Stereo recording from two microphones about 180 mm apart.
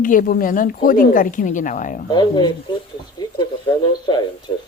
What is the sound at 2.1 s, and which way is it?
Speech, 25° left (ahead or behind).